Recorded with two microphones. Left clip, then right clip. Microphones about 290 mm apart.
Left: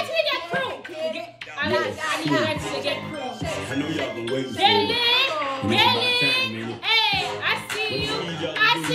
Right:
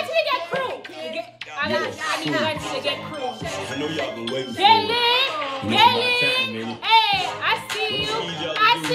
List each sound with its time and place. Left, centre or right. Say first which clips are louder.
0.1 s music: right 3 dB; centre
4.6 s a child's voice: right 3 dB; centre
6.9 s music: right 3 dB; centre
8.6 s speech: right 2 dB; centre